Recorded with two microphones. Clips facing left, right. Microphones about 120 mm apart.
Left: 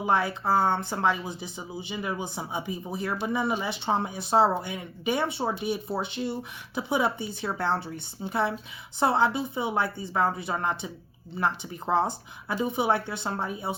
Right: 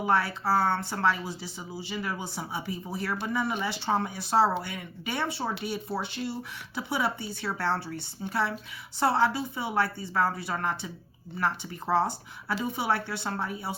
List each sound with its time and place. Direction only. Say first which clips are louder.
0.0 s speech: left 1 dB; 20° left (ahead or behind)